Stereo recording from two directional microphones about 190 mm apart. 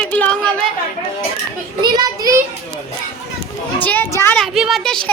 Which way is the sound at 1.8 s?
20° right (ahead or behind).